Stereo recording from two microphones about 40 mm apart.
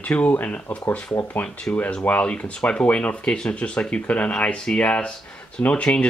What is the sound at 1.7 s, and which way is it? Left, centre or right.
Speech, left.